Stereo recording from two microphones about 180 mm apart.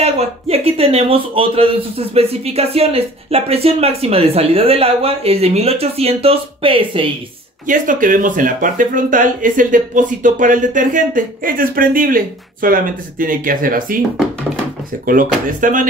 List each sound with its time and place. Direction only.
0.0 s a man's voice: 35° right (ahead or behind)
7.6 s speech: 45° right (ahead or behind)
15.0 s speech: 50° right (ahead or behind)